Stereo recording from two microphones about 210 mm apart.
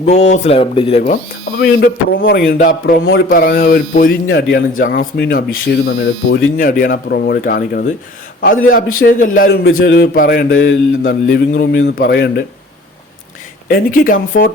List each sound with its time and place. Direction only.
0.0 s speech: 30° left (ahead or behind)
2.1 s a man's voice: 45° left (ahead or behind)
9.7 s mantra: 60° left (ahead or behind)
10.2 s mantra: 45° left (ahead or behind)
11.3 s speech: 40° left (ahead or behind)
13.7 s speech: 45° left (ahead or behind)